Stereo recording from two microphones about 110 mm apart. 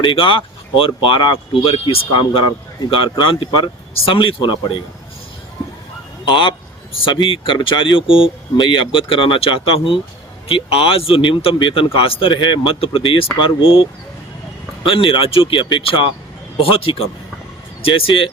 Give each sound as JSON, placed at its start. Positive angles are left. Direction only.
{"t": 0.0, "sound": "speech", "side_deg": 50}
{"t": 6.2, "sound": "speech", "side_deg": 50}
{"t": 14.8, "sound": "speech", "side_deg": 50}